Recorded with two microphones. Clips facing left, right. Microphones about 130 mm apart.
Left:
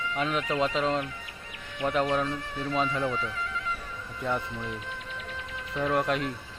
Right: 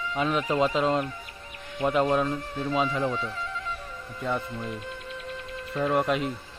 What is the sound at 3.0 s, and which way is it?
Music, 35° right (ahead or behind).